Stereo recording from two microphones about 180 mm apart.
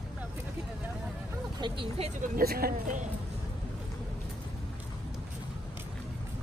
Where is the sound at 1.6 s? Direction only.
30° right (ahead or behind).